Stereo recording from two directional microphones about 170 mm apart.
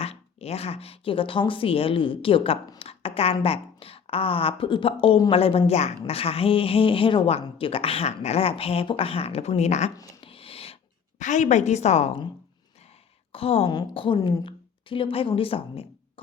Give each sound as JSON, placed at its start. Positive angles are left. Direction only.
{"t": 0.0, "sound": "a woman's voice", "side_deg": 35}
{"t": 10.2, "sound": "a sound", "side_deg": 35}
{"t": 11.2, "sound": "a woman's voice", "side_deg": 45}
{"t": 13.3, "sound": "a woman's voice", "side_deg": 35}
{"t": 14.2, "sound": "speech", "side_deg": 20}
{"t": 14.4, "sound": "speech", "side_deg": 30}